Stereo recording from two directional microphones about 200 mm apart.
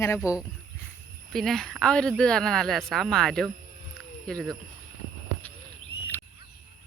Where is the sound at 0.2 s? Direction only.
15° left (ahead or behind).